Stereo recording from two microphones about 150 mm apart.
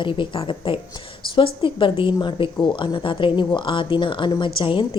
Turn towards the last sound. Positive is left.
turn(degrees=35)  # may be behind; listen again after turning